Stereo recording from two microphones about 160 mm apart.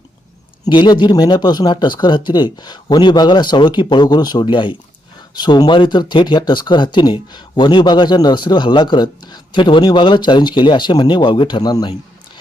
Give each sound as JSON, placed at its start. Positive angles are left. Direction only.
{"t": 0.6, "sound": "speech", "side_deg": 30}